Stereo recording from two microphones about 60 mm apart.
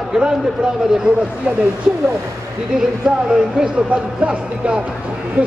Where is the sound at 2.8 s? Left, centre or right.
Centre.